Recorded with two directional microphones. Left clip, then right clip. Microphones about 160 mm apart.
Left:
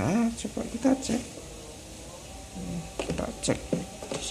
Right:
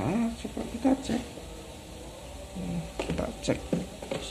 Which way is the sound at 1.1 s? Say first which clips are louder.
Left 1 dB; 25° left (ahead or behind).